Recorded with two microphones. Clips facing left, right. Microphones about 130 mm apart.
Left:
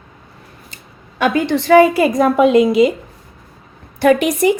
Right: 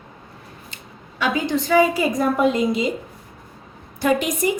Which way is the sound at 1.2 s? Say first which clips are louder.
Left 6 dB; 60° left (ahead or behind).